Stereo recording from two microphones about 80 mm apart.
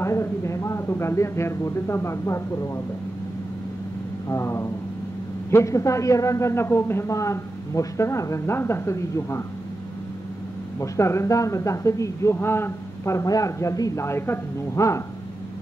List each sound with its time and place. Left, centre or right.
0.0 s a man's voice: left
4.3 s a man's voice: left
10.8 s a man's voice: left
14.0 s a man's voice: left